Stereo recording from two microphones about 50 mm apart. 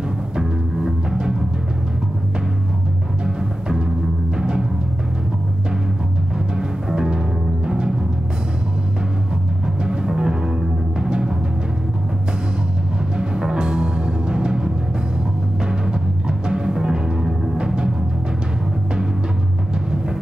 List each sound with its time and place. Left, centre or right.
0.4 s timpani: centre
3.3 s timpani: centre
6.3 s timpani: centre
9.8 s timpani: centre
13.2 s music: centre
15.6 s timpani: centre